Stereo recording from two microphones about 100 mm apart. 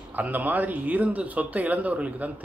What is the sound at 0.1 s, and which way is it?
Speech, 15° right (ahead or behind).